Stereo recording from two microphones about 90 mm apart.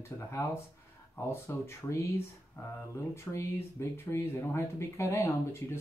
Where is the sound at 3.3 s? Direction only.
30° left (ahead or behind).